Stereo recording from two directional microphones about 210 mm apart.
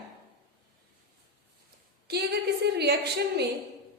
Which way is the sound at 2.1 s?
50° right (ahead or behind).